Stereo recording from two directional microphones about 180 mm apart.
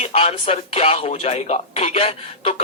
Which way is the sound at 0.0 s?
35° left (ahead or behind).